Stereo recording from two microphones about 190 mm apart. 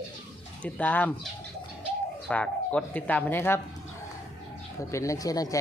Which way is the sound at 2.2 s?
5° left (ahead or behind).